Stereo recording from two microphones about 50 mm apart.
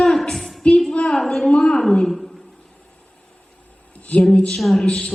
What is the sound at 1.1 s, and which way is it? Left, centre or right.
A woman's voice, centre.